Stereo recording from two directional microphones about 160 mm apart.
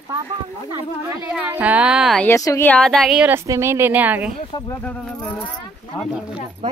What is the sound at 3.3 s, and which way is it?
A woman's voice, 15° right (ahead or behind).